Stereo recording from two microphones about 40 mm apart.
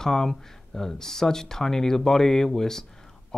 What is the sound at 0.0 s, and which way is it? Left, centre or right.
Speech, centre.